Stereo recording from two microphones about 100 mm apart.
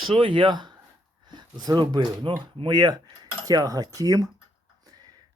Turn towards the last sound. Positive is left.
turn(degrees=-35)  # may be behind; listen again after turning